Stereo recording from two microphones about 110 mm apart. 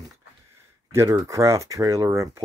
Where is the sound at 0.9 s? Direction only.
25° right (ahead or behind).